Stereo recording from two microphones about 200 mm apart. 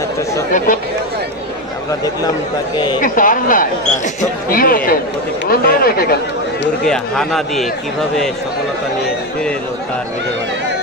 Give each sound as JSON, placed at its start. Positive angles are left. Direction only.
{"t": 3.0, "sound": "speech", "side_deg": 40}
{"t": 6.9, "sound": "speech", "side_deg": 0}